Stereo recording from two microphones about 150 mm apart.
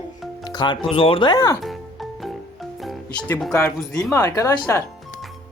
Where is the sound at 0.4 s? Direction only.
30° left (ahead or behind).